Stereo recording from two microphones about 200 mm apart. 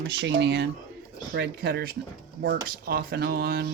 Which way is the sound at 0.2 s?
60° right (ahead or behind).